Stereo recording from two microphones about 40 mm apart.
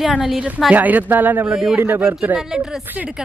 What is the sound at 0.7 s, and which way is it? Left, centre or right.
Speech, right.